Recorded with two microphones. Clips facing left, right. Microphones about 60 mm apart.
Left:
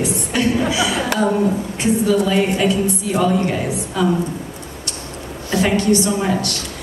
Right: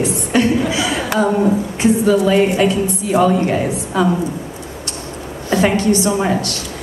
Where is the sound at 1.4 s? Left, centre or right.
Centre.